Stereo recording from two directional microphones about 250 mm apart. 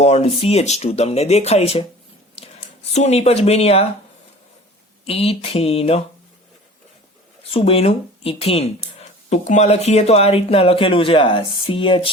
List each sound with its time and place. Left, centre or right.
0.0 s speech: left
2.9 s speech: left
5.0 s speech: left
7.5 s speech: left